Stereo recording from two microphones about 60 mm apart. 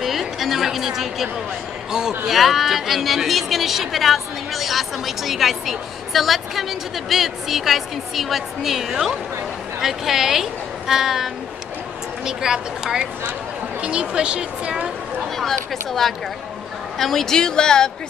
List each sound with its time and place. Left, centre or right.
0.0 s a woman's voice: centre
15.3 s speech: centre